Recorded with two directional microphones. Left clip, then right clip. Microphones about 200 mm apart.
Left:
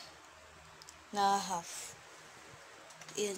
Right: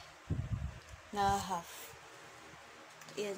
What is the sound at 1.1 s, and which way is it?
Speech, 5° left (ahead or behind).